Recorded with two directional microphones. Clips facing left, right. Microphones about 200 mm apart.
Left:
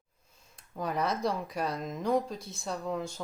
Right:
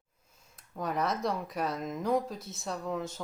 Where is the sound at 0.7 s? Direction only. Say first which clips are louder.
Even; centre (ahead or behind).